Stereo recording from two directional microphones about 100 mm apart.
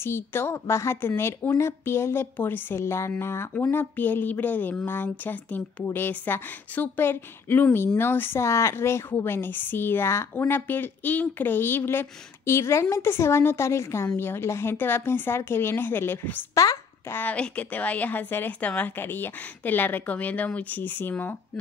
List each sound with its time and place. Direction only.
0.0 s a woman's voice: 25° left (ahead or behind)